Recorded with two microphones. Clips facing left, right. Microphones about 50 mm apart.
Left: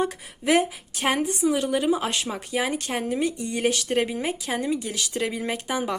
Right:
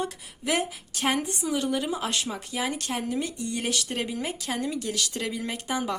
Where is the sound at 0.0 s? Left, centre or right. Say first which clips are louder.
Left 5 dB; left.